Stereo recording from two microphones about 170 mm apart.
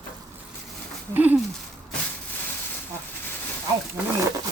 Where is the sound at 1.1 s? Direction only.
10° right (ahead or behind).